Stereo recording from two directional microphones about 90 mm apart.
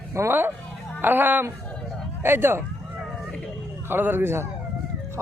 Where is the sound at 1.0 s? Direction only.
20° right (ahead or behind).